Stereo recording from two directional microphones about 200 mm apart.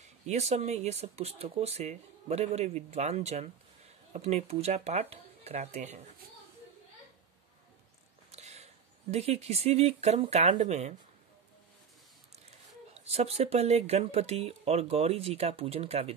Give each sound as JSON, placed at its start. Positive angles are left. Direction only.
{"t": 0.0, "sound": "speech", "side_deg": -35}
{"t": 8.3, "sound": "a sound", "side_deg": -35}
{"t": 9.1, "sound": "speech", "side_deg": -30}
{"t": 12.9, "sound": "speech", "side_deg": -30}